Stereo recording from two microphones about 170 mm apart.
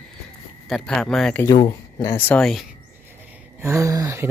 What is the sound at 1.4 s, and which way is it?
Speech, 25° left (ahead or behind).